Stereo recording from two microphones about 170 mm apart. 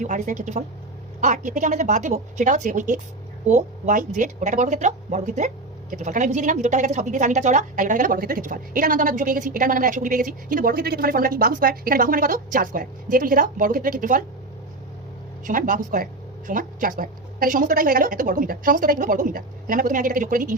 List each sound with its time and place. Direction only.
0.0 s a woman's voice: 50° right (ahead or behind)
15.4 s a woman's voice: 50° right (ahead or behind)